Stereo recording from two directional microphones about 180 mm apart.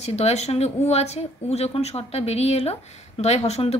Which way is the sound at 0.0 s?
35° left (ahead or behind).